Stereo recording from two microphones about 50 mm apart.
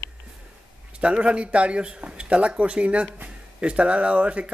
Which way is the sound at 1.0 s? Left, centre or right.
Right.